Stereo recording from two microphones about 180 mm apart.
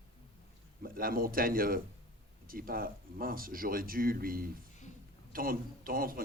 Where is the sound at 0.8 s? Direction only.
55° right (ahead or behind).